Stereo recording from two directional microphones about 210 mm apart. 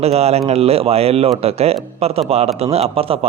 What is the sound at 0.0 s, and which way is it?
Speech, 30° right (ahead or behind).